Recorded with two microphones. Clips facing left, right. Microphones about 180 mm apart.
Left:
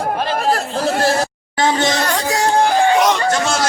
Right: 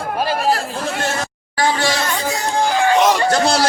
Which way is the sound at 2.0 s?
75° left (ahead or behind).